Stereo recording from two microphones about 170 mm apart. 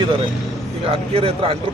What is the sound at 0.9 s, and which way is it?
Speech, 35° right (ahead or behind).